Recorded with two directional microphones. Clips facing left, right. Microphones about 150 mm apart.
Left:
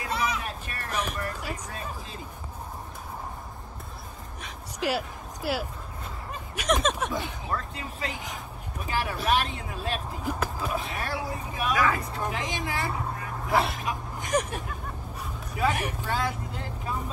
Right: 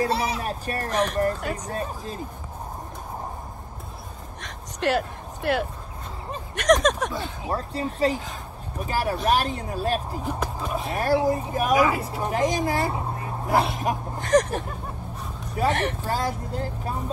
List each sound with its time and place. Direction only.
0.0 s a sound: 35° right (ahead or behind)
1.5 s speech: 40° right (ahead or behind)
4.4 s a sound: 5° left (ahead or behind)
6.5 s speech: 5° left (ahead or behind)
7.4 s speech: 35° right (ahead or behind)
10.2 s speech: 5° left (ahead or behind)
10.9 s speech: 40° right (ahead or behind)
11.7 s speech: 15° right (ahead or behind)
12.3 s speech: 45° right (ahead or behind)
12.9 s vehicle: 25° right (ahead or behind)
13.6 s speech: centre (ahead or behind)
15.7 s speech: 10° left (ahead or behind)
16.0 s speech: 40° right (ahead or behind)